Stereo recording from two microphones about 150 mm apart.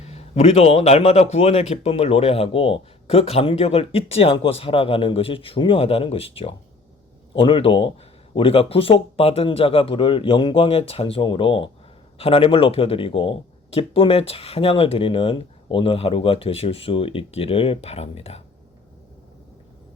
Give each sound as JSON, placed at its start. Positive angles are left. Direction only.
{"t": 0.0, "sound": "a man's voice", "side_deg": 45}